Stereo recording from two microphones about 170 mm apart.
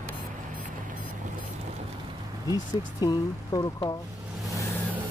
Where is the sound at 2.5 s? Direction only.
20° left (ahead or behind).